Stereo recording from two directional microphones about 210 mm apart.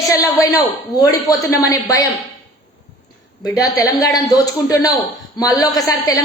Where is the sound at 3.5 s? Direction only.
15° left (ahead or behind).